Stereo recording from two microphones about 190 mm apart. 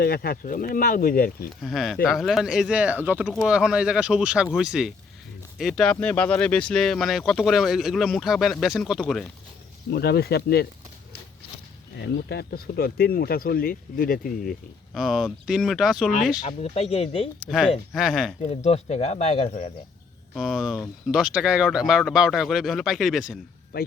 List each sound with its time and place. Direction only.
0.0 s speech: 55° left (ahead or behind)
1.6 s speech: centre (ahead or behind)
9.9 s speech: 55° left (ahead or behind)
11.9 s speech: 60° left (ahead or behind)
14.9 s speech: centre (ahead or behind)
16.5 s speech: 35° left (ahead or behind)
17.5 s speech: centre (ahead or behind)
18.5 s speech: 35° left (ahead or behind)
20.3 s speech: centre (ahead or behind)
23.7 s speech: 50° left (ahead or behind)